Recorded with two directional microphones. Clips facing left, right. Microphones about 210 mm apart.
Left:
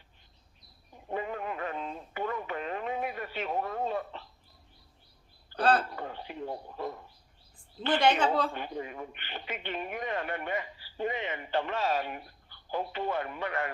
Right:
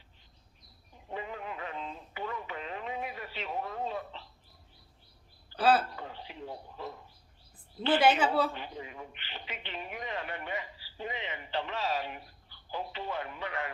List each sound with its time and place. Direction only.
0.9 s radio: 50° left (ahead or behind)
5.5 s speech: 5° right (ahead or behind)
6.0 s a sound: 50° left (ahead or behind)
7.8 s a woman's voice: 5° right (ahead or behind)
8.5 s a man's voice: 50° left (ahead or behind)